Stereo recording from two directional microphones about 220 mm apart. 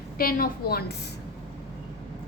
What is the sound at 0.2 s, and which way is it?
Speech, 40° left (ahead or behind).